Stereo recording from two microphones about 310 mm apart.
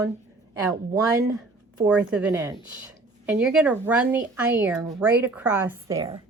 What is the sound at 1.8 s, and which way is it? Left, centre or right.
A woman's voice, centre.